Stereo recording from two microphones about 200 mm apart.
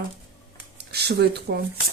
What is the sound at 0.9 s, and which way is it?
Speech, 55° right (ahead or behind).